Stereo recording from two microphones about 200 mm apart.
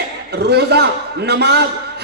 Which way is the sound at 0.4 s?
55° right (ahead or behind).